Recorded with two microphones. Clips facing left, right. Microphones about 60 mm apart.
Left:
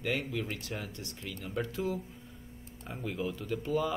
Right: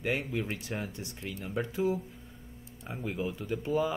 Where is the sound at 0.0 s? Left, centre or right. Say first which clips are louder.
Right 2 dB; centre.